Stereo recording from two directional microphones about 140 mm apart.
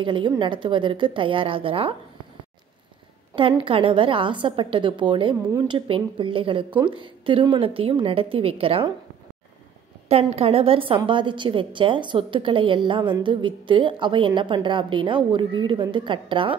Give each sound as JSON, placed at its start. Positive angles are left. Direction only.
{"t": 0.0, "sound": "a woman's voice", "side_deg": -35}
{"t": 3.3, "sound": "a woman's voice", "side_deg": -40}
{"t": 10.0, "sound": "a woman's voice", "side_deg": -45}